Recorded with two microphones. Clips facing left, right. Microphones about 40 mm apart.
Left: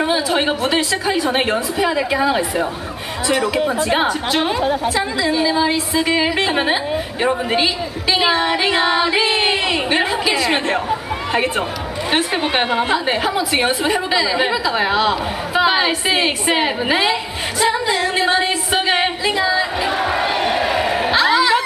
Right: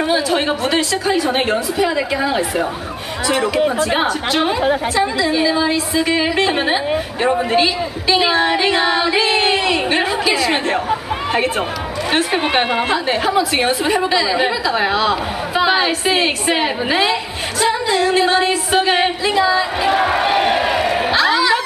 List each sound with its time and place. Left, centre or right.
0.0 s a woman's voice: centre
3.7 s a woman's voice: centre
12.9 s a woman's voice: centre
19.9 s crowd: centre
20.7 s a sound: centre